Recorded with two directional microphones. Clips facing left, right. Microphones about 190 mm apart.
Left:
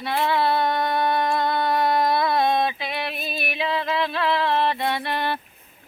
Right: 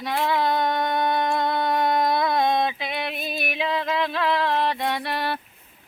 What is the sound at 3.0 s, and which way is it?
Music, 15° right (ahead or behind).